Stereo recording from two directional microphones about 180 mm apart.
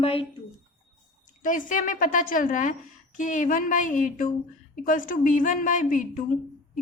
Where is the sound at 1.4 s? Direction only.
45° left (ahead or behind).